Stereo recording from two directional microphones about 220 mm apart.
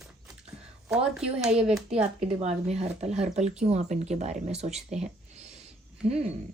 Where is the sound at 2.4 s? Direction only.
30° right (ahead or behind).